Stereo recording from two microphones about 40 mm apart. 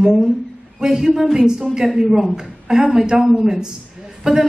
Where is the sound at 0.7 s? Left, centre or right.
Centre.